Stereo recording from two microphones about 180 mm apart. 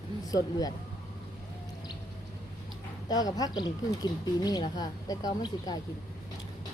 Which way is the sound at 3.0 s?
20° left (ahead or behind).